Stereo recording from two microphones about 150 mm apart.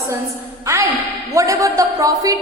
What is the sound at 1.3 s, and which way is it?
A woman's voice, 20° right (ahead or behind).